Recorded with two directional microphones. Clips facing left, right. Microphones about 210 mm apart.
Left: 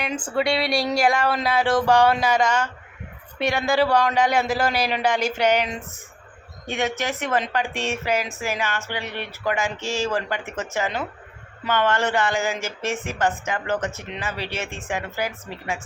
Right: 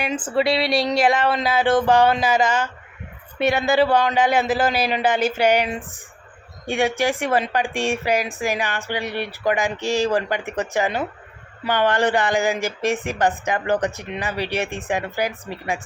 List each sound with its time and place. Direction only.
0.0 s speech: 5° right (ahead or behind)